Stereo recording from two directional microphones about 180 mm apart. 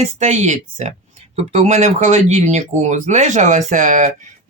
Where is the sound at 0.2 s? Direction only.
40° right (ahead or behind).